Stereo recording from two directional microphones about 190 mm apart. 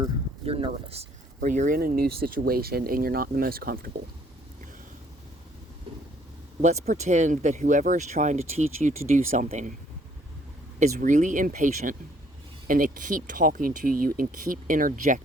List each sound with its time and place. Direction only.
0.0 s speech: 30° right (ahead or behind); by 3.9 s 50° right (ahead or behind)
6.6 s speech: 35° right (ahead or behind)
10.8 s speech: 40° right (ahead or behind)